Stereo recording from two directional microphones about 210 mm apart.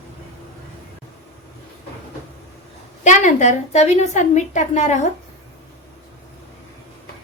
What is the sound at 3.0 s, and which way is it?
A woman's voice, 35° left (ahead or behind).